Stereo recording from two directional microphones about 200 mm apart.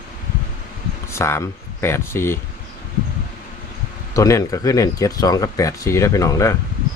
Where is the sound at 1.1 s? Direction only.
15° left (ahead or behind).